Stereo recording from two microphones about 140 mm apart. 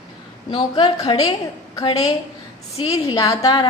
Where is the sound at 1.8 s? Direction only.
50° left (ahead or behind).